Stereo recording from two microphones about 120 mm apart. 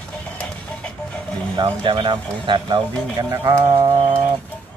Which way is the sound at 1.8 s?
45° right (ahead or behind).